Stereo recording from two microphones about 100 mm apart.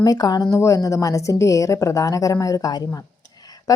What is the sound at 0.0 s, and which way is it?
A woman's voice, 40° left (ahead or behind).